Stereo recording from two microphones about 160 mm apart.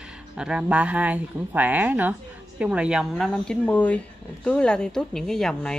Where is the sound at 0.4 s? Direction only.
5° right (ahead or behind).